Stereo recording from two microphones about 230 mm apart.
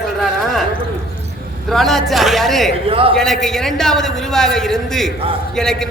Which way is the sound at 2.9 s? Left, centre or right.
Right.